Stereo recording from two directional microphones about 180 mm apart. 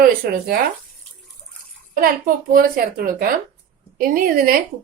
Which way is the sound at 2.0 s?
50° right (ahead or behind).